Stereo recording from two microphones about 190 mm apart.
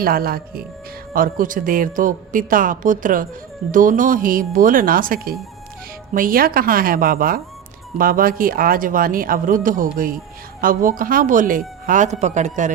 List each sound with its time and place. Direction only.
0.0 s speech: 50° right (ahead or behind)